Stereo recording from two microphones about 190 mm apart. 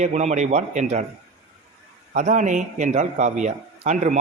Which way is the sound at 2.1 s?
40° right (ahead or behind).